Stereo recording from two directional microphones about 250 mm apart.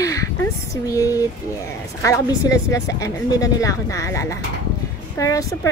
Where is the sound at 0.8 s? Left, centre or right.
Centre.